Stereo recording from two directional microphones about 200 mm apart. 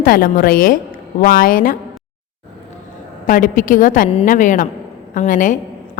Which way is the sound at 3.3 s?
45° left (ahead or behind).